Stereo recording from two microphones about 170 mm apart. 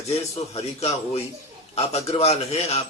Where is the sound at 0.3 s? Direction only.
40° left (ahead or behind).